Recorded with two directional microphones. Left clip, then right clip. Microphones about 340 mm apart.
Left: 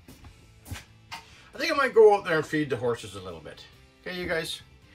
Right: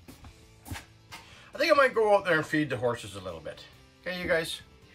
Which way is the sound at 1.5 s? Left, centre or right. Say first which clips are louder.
Left 1 dB; centre.